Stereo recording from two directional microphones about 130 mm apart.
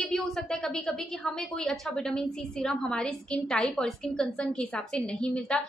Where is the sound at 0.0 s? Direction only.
Centre (ahead or behind).